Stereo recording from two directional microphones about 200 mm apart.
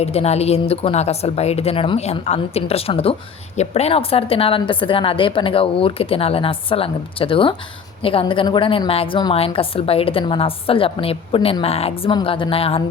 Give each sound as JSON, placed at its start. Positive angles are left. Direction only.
{"t": 0.0, "sound": "speech", "side_deg": 30}